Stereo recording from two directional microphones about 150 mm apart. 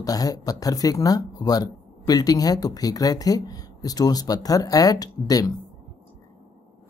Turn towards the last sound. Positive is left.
turn(degrees=25)  # may be behind; listen again after turning